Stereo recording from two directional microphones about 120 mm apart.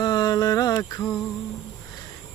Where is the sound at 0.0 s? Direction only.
35° left (ahead or behind).